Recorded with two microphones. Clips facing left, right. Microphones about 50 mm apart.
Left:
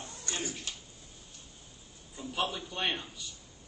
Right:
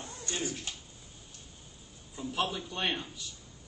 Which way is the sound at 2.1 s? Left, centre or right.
Centre.